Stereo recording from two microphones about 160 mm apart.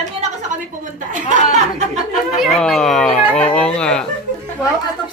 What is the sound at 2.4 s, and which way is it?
Speech, centre (ahead or behind).